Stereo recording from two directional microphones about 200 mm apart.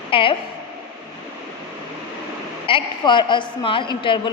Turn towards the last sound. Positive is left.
turn(degrees=25)  # may be behind; listen again after turning